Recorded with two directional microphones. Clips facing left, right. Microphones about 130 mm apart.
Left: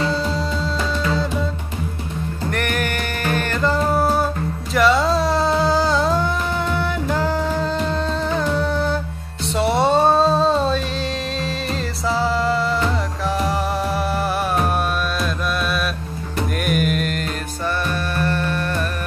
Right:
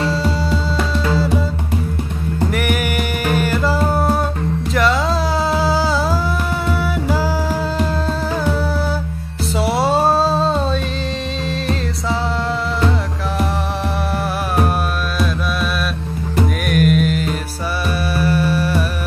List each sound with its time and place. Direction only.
0.0 s music: centre (ahead or behind)
2.5 s music: 10° right (ahead or behind)
4.7 s a sound: centre (ahead or behind)
7.1 s music: 5° right (ahead or behind)
9.6 s a sound: 5° right (ahead or behind)
11.6 s music: centre (ahead or behind)
16.6 s music: centre (ahead or behind)